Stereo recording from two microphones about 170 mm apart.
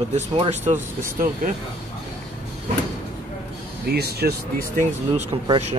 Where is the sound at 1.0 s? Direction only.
55° right (ahead or behind).